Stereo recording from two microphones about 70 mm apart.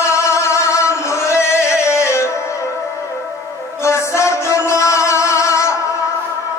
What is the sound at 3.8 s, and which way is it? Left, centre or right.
Music, left.